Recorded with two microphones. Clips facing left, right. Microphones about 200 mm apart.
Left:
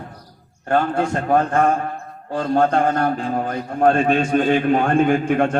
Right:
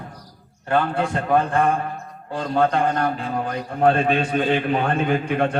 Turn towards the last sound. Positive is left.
turn(degrees=45)  # may be behind; listen again after turning